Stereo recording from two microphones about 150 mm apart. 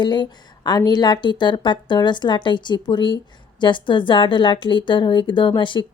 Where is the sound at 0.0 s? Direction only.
30° left (ahead or behind).